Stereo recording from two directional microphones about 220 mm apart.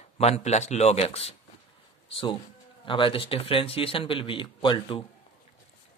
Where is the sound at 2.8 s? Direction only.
20° left (ahead or behind).